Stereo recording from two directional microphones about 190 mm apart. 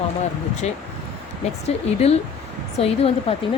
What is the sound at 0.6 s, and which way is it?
Speech, 35° left (ahead or behind).